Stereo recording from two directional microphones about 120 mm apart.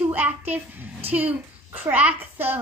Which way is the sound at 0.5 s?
15° right (ahead or behind).